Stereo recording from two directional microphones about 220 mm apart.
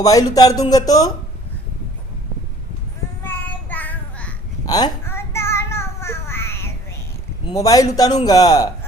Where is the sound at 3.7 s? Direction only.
10° left (ahead or behind).